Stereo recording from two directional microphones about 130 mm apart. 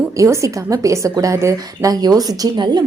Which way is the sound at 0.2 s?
25° right (ahead or behind).